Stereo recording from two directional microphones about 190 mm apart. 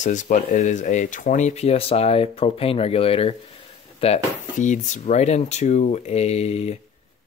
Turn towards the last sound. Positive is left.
turn(degrees=35)  # may be behind; listen again after turning